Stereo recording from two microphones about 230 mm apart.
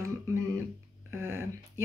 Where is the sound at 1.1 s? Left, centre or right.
Centre.